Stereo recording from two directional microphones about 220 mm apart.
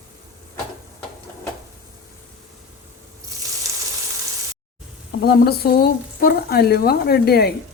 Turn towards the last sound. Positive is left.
turn(degrees=45)  # may be behind; listen again after turning